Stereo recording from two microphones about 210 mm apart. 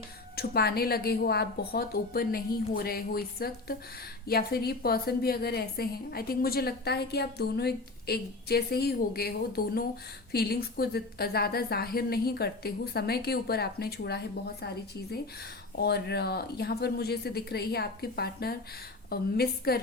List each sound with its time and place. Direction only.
0.3 s a woman's voice: 45° left (ahead or behind)
15.8 s a woman's voice: 50° left (ahead or behind)